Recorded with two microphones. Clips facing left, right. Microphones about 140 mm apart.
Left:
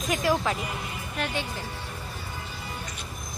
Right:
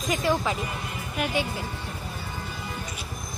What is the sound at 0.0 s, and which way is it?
Speech, centre (ahead or behind).